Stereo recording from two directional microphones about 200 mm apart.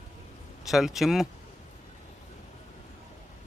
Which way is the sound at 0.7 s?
Centre (ahead or behind).